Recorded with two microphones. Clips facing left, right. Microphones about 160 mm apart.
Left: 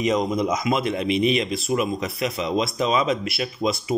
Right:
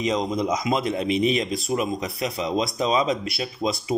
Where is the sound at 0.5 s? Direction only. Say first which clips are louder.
Left 1 dB; 35° right (ahead or behind).